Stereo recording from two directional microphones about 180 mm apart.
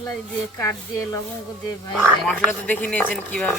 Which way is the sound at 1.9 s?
5° right (ahead or behind).